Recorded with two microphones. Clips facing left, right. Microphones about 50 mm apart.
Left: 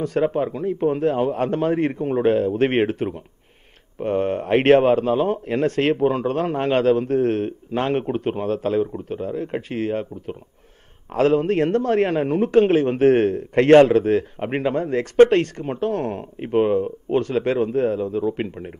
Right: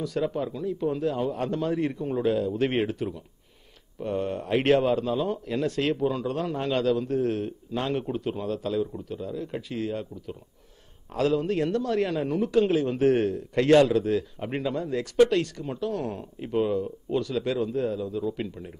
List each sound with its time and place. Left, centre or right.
0.0 s a man's voice: left